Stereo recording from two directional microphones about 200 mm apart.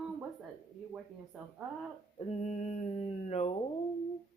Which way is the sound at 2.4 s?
40° left (ahead or behind).